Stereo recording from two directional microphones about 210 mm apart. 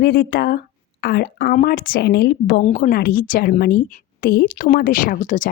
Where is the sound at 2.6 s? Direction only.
35° left (ahead or behind).